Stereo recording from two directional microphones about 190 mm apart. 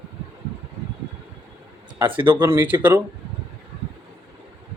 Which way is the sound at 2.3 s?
10° right (ahead or behind).